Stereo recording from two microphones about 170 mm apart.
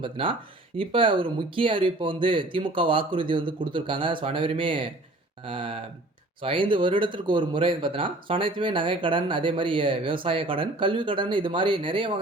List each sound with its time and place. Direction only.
0.0 s speech: 30° right (ahead or behind)